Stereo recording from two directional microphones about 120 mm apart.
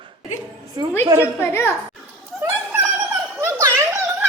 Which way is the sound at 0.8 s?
40° right (ahead or behind).